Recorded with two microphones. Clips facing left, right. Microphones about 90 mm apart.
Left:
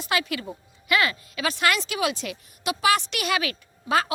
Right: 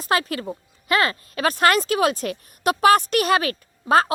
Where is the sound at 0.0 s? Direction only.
40° right (ahead or behind).